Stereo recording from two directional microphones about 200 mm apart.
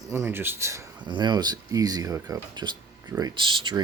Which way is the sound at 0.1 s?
10° right (ahead or behind).